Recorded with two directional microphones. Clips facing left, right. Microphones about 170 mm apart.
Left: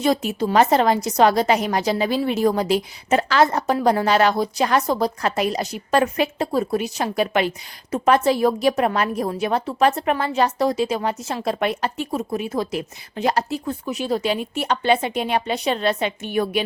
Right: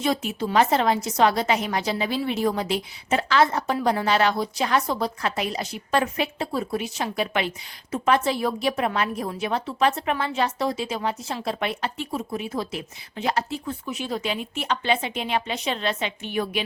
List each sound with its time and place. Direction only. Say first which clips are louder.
0.0 s a woman's voice: left 5 dB; 40° left (ahead or behind)